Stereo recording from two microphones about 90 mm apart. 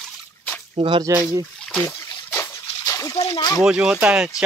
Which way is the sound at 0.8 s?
75° right (ahead or behind).